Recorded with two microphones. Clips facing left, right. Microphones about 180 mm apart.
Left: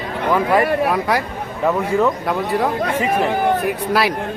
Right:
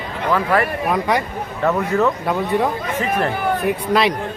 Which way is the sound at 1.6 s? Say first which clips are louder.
Left 1 dB; 10° left (ahead or behind).